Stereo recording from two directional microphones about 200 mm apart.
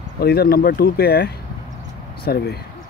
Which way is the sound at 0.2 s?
50° left (ahead or behind).